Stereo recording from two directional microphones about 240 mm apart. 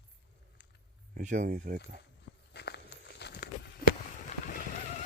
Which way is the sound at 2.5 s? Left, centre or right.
Left.